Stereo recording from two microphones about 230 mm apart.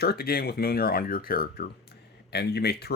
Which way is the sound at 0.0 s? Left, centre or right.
Left.